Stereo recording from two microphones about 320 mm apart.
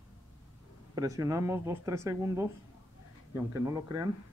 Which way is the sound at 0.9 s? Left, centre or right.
Centre.